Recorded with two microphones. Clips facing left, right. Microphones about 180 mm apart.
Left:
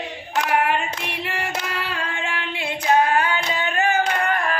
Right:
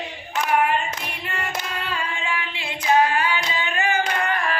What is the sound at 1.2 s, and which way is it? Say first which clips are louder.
Female singing: left 1 dB; 70° left (ahead or behind).